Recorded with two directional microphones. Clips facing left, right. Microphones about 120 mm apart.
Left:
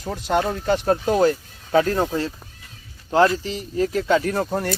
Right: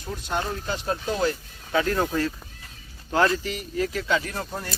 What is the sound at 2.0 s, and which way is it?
Speech, 25° left (ahead or behind).